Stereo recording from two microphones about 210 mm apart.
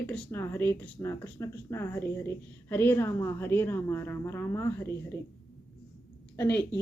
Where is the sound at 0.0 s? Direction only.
10° left (ahead or behind).